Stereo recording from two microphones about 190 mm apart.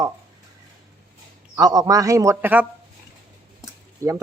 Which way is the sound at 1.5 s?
20° right (ahead or behind).